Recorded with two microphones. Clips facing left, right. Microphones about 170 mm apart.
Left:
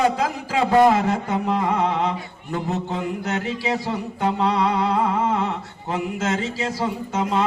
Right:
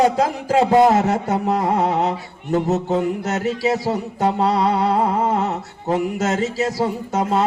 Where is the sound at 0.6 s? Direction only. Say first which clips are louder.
Right 1 dB; 25° right (ahead or behind).